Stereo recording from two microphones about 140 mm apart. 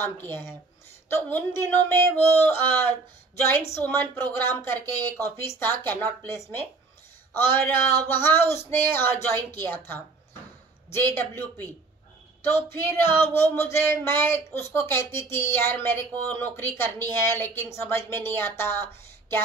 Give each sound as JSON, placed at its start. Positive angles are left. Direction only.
{"t": 0.0, "sound": "speech", "side_deg": 15}